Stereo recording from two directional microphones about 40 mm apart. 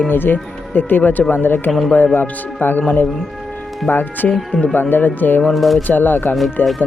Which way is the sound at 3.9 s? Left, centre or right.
Left.